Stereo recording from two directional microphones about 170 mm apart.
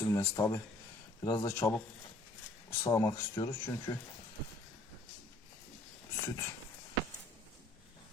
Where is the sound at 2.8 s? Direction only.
20° left (ahead or behind).